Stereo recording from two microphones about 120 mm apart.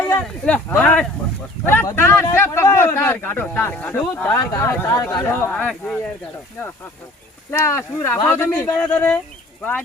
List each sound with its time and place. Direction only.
0.2 s speech: 15° left (ahead or behind)
7.5 s speech: 20° left (ahead or behind)